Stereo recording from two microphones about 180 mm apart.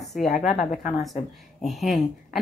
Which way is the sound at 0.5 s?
40° left (ahead or behind).